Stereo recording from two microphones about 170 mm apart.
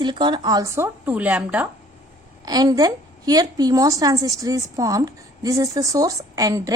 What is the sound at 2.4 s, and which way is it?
A woman's voice, 25° right (ahead or behind).